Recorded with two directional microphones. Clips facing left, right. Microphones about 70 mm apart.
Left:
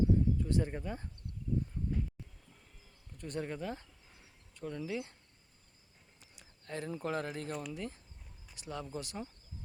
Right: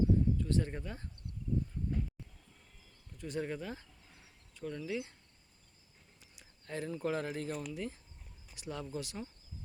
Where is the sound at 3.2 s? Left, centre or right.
Centre.